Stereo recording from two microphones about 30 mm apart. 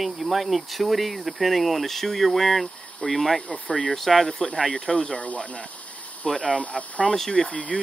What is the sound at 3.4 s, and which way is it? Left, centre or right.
Speech, left.